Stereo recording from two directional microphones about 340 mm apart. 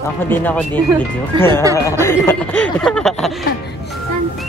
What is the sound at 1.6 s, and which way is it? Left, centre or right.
Speech, centre.